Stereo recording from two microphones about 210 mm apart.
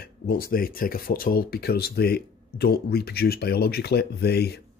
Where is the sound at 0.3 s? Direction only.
45° left (ahead or behind).